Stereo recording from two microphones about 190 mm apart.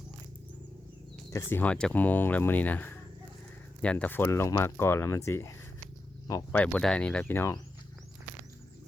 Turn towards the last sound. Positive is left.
turn(degrees=15)  # may be behind; listen again after turning